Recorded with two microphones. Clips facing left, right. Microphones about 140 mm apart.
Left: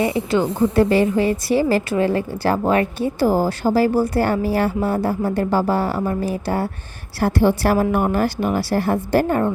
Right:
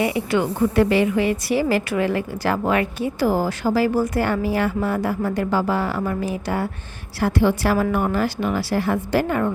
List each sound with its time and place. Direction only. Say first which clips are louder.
0.0 s a woman's voice: left 2 dB; 30° left (ahead or behind); by 9.4 s 45° left (ahead or behind)